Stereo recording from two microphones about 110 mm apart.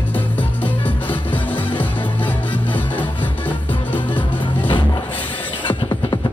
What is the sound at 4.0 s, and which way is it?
Music, 45° left (ahead or behind).